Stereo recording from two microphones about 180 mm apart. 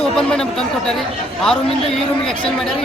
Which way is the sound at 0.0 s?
5° left (ahead or behind).